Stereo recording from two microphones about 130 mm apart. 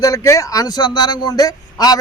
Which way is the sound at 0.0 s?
25° left (ahead or behind).